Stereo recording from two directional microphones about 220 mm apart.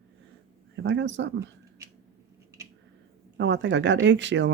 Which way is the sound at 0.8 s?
55° right (ahead or behind).